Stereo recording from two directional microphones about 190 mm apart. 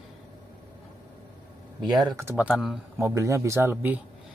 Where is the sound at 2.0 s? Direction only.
15° right (ahead or behind).